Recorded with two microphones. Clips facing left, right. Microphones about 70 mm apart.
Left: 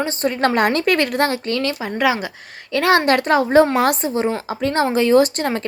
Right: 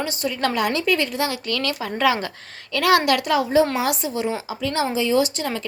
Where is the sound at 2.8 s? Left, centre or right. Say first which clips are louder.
Left 2 dB; left.